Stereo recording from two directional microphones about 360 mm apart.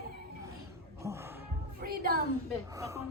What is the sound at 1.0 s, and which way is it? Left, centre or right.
Speech, centre.